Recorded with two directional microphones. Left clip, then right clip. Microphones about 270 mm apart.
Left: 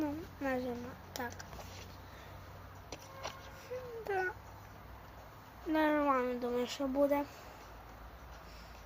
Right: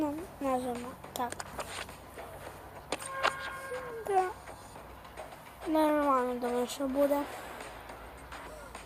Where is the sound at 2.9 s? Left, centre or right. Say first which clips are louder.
Right 14 dB; right.